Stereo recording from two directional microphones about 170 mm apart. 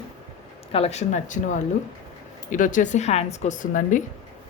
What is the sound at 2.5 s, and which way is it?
A woman's voice, 50° left (ahead or behind).